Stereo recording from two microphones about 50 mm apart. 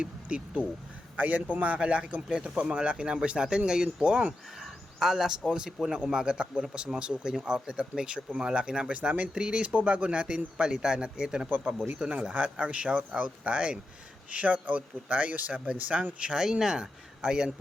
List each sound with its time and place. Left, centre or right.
0.0 s a man's voice: right
4.6 s a sound: centre
5.5 s speech: centre
11.4 s speech: right
11.9 s speech: right
16.3 s speech: centre